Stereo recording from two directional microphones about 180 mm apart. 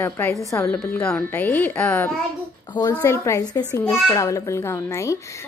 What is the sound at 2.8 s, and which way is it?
A woman's voice, 20° left (ahead or behind).